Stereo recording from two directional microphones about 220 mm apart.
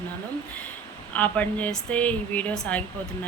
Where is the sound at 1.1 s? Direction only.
5° left (ahead or behind).